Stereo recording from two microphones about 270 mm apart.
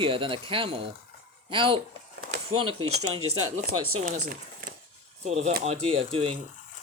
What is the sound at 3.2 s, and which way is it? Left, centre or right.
Speech, right.